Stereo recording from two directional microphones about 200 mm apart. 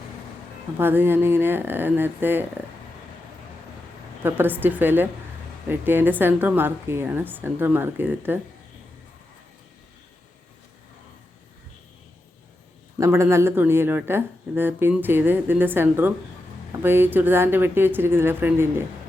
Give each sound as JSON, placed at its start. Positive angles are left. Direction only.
{"t": 0.8, "sound": "speech", "side_deg": -10}
{"t": 4.2, "sound": "speech", "side_deg": -10}
{"t": 13.0, "sound": "speech", "side_deg": -15}